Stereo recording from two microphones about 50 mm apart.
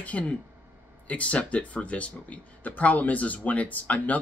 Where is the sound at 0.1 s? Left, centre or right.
Left.